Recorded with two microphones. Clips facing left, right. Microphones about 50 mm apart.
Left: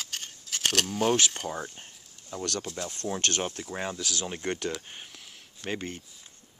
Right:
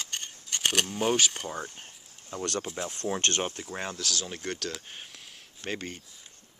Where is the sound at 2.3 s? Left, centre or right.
Right.